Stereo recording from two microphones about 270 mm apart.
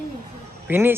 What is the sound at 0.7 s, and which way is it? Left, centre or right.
Speech, centre.